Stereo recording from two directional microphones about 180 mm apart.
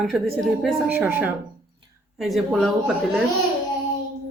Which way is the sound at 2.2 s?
Centre (ahead or behind).